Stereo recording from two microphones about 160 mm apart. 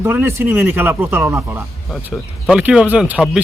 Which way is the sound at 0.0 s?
15° right (ahead or behind).